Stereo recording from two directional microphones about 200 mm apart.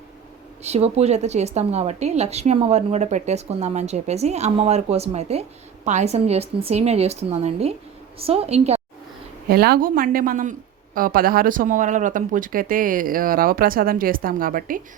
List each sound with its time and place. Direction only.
0.6 s speech: 30° right (ahead or behind)
9.5 s speech: 50° right (ahead or behind)